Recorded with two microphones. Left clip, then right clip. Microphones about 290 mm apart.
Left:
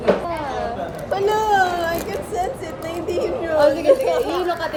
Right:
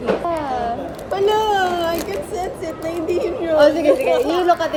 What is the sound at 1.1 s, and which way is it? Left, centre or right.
A woman's voice, centre.